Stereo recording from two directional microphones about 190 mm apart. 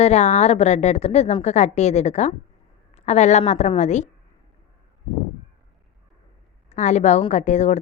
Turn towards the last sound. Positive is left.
turn(degrees=40)  # may be behind; listen again after turning